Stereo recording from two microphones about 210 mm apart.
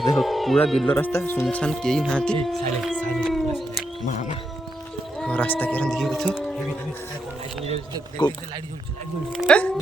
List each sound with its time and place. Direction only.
0.0 s speech: centre (ahead or behind)
4.0 s speech: 35° left (ahead or behind)
5.2 s speech: 5° left (ahead or behind)
7.6 s speech: 30° right (ahead or behind)
9.3 s speech: 5° left (ahead or behind)